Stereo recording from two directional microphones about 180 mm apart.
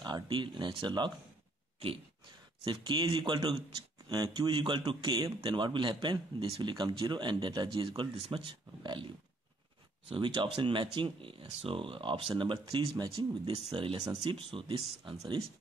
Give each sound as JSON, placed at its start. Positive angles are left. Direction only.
{"t": 0.0, "sound": "speech", "side_deg": -25}
{"t": 2.6, "sound": "speech", "side_deg": -25}
{"t": 10.0, "sound": "speech", "side_deg": -25}